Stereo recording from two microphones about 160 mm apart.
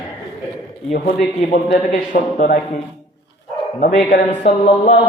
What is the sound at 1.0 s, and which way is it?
Speech, 50° left (ahead or behind).